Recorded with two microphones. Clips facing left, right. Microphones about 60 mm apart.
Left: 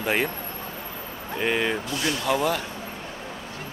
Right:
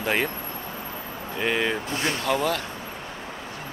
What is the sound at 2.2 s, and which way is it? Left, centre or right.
Speech, centre.